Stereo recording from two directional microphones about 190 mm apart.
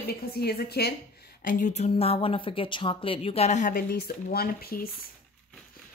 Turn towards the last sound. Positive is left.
turn(degrees=55)  # may be behind; listen again after turning